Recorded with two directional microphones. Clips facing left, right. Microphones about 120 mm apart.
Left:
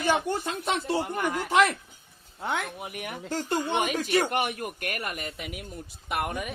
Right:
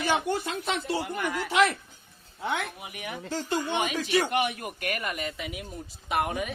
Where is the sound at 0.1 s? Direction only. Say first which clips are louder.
Left 2 dB; 45° left (ahead or behind).